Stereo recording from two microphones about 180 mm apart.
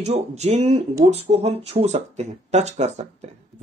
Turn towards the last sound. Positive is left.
turn(degrees=-35)  # may be behind; listen again after turning